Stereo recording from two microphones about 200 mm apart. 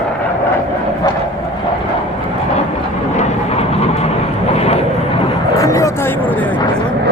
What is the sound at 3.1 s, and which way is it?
Vehicle, 30° left (ahead or behind).